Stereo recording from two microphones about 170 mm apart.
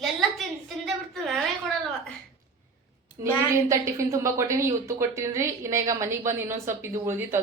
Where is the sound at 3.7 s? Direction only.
20° right (ahead or behind).